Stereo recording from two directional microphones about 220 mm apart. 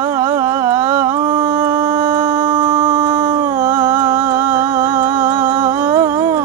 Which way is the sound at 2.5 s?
20° right (ahead or behind).